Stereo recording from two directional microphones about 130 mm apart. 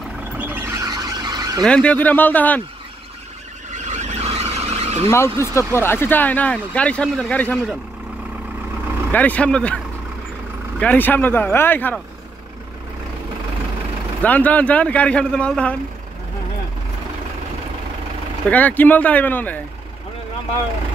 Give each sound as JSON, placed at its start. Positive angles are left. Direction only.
{"t": 0.4, "sound": "a sound", "side_deg": -15}
{"t": 0.8, "sound": "vehicle", "side_deg": -30}
{"t": 1.6, "sound": "speech", "side_deg": 10}
{"t": 3.7, "sound": "vehicle", "side_deg": -65}
{"t": 5.1, "sound": "speech", "side_deg": 20}
{"t": 9.1, "sound": "speech", "side_deg": 10}
{"t": 10.8, "sound": "speech", "side_deg": 15}
{"t": 14.2, "sound": "speech", "side_deg": 10}
{"t": 18.5, "sound": "speech", "side_deg": 10}